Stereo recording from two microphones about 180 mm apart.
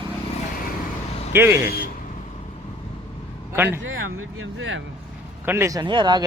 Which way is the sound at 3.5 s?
10° right (ahead or behind).